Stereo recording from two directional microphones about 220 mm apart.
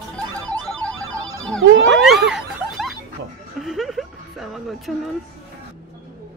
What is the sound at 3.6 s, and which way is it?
Music, centre (ahead or behind).